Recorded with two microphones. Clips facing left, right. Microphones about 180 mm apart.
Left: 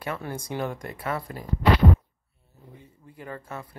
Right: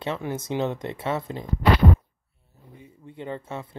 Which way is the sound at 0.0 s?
25° right (ahead or behind).